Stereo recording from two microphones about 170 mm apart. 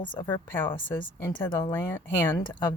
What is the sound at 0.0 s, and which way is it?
Speech, 30° left (ahead or behind).